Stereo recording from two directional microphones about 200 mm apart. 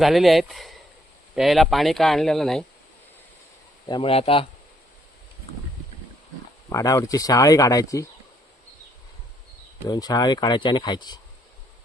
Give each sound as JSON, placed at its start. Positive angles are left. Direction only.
{"t": 0.0, "sound": "speech", "side_deg": 0}
{"t": 3.8, "sound": "speech", "side_deg": 25}
{"t": 6.7, "sound": "speech", "side_deg": 15}
{"t": 9.9, "sound": "speech", "side_deg": 20}